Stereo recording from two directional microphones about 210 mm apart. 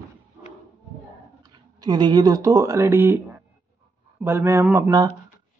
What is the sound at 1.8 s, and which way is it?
Speech, 20° right (ahead or behind).